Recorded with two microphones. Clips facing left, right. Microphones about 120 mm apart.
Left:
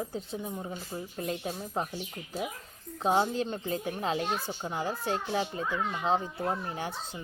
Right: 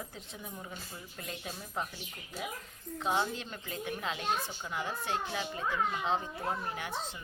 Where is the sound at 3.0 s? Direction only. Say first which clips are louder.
Left 6 dB; 35° left (ahead or behind).